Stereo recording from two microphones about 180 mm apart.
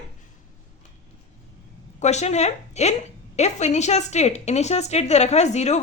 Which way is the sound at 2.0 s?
40° left (ahead or behind).